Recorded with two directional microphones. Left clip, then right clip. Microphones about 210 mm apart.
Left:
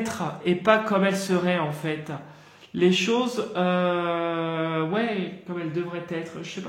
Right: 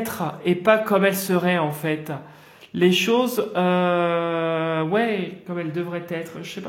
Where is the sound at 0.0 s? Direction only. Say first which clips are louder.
Right 2 dB; 30° right (ahead or behind).